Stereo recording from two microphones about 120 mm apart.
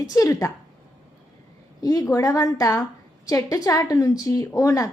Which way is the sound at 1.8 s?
30° left (ahead or behind).